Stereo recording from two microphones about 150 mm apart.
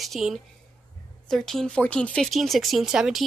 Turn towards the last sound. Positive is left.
turn(degrees=0)  # may be behind; listen again after turning